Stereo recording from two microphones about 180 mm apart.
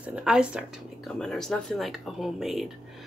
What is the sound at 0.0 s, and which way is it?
Speech, 5° right (ahead or behind).